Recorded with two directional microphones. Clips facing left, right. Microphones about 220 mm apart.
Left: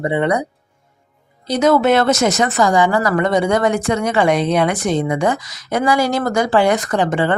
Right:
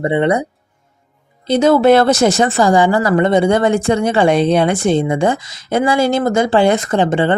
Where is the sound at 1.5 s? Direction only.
30° right (ahead or behind).